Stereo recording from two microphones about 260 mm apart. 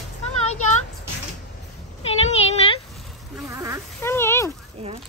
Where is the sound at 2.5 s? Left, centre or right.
Left.